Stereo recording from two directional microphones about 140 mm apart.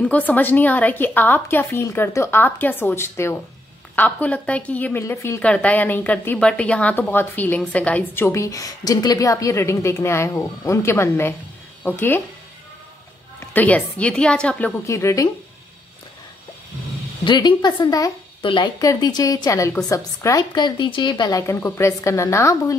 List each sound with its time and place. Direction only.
0.0 s a woman's voice: 10° left (ahead or behind)
5.4 s a woman's voice: 10° left (ahead or behind)
13.4 s a woman's voice: 10° left (ahead or behind)
14.9 s a woman's voice: 20° left (ahead or behind)
17.2 s a woman's voice: 35° left (ahead or behind)
20.5 s a woman's voice: 35° left (ahead or behind)